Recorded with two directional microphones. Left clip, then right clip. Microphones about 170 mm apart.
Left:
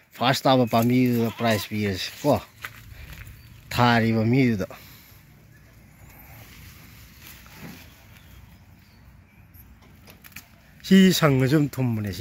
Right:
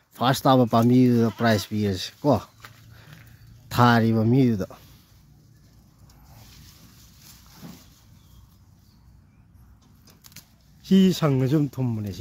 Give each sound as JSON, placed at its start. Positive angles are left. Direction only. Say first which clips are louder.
{"t": 0.1, "sound": "speech", "louder": "even", "side_deg": -25}
{"t": 3.6, "sound": "speech", "louder": "right 1 dB", "side_deg": -35}
{"t": 7.6, "sound": "a sound", "louder": "left 2 dB", "side_deg": -55}
{"t": 10.8, "sound": "speech", "louder": "left 3 dB", "side_deg": 0}